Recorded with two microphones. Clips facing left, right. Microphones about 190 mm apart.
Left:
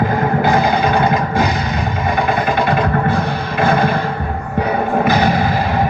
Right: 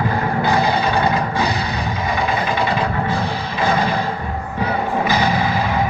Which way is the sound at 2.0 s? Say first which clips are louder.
Left 4 dB; 50° left (ahead or behind).